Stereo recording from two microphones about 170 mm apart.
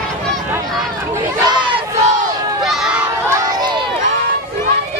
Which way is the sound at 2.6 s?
5° right (ahead or behind).